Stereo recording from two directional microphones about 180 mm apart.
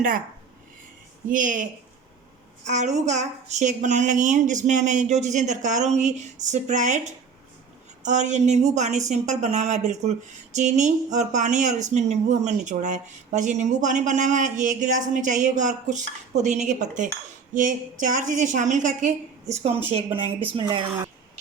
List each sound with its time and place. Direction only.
1.3 s a woman's voice: 45° right (ahead or behind)
2.6 s a woman's voice: 40° right (ahead or behind); by 21.1 s 25° right (ahead or behind)